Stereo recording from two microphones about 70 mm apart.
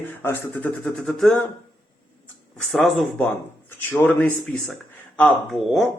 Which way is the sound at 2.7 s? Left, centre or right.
Centre.